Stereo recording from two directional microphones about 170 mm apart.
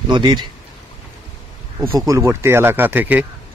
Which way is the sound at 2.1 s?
15° right (ahead or behind).